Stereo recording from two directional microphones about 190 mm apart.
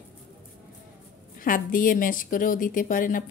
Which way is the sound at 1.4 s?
45° left (ahead or behind).